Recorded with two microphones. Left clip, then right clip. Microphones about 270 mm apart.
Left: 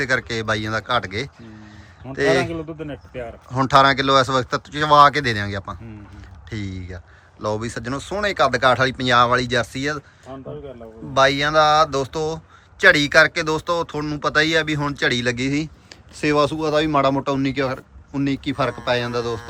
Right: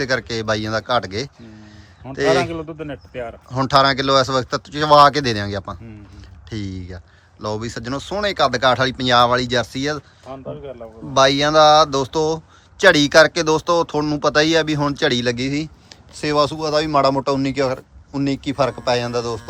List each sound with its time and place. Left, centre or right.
0.0 s a man's voice: centre
10.3 s speech: right
11.1 s speech: centre